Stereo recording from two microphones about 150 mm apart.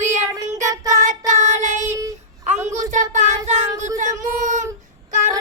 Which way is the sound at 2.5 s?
50° right (ahead or behind).